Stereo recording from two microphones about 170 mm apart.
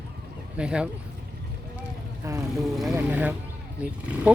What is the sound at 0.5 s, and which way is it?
Speech, 5° right (ahead or behind).